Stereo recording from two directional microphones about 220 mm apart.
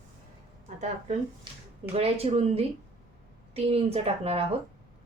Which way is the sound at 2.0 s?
30° right (ahead or behind).